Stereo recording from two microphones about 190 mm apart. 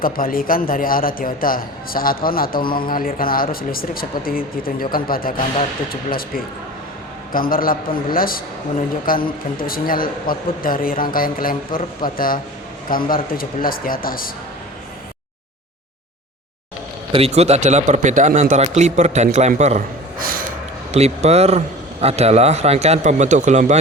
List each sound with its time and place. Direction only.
0.0 s a man's voice: 50° left (ahead or behind)
17.1 s speech: 30° right (ahead or behind); by 20.4 s 50° right (ahead or behind)
20.9 s speech: 35° right (ahead or behind)